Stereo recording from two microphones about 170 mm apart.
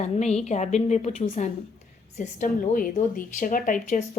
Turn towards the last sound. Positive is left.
turn(degrees=50)  # may be behind; listen again after turning